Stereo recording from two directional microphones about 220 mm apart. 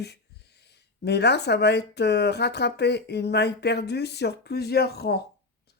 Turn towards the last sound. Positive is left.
turn(degrees=45)  # may be behind; listen again after turning